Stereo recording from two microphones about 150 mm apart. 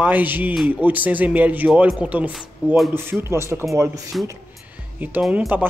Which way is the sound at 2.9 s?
15° right (ahead or behind).